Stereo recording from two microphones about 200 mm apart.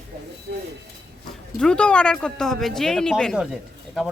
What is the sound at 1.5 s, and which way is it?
Speech, 5° left (ahead or behind).